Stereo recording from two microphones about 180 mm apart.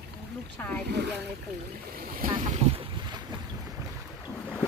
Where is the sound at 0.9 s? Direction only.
70° right (ahead or behind).